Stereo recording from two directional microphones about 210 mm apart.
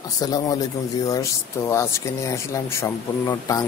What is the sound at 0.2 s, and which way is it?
Speech, 20° left (ahead or behind).